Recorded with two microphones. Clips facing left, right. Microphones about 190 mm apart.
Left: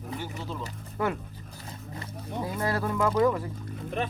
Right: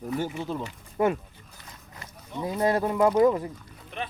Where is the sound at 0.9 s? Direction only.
25° right (ahead or behind).